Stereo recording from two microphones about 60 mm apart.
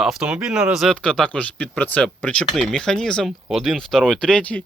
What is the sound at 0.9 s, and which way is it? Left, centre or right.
Speech, centre.